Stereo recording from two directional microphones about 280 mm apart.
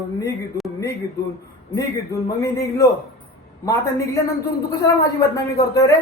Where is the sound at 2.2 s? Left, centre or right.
Centre.